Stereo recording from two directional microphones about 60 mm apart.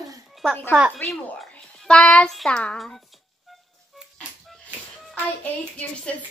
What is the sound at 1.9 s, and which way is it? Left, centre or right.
A child's voice, centre.